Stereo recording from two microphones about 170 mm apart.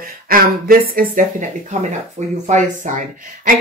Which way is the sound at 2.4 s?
45° right (ahead or behind).